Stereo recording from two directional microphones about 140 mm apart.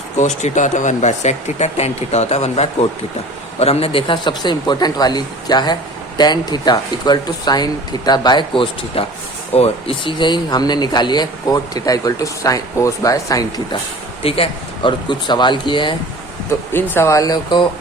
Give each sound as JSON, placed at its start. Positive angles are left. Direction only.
{"t": 0.2, "sound": "speech", "side_deg": 60}
{"t": 14.2, "sound": "speech", "side_deg": 40}
{"t": 16.5, "sound": "speech", "side_deg": 15}